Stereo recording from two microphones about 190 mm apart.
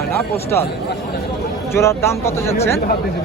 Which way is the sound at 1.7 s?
15° left (ahead or behind).